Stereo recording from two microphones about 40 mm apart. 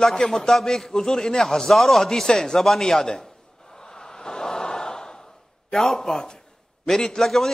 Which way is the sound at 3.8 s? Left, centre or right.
Centre.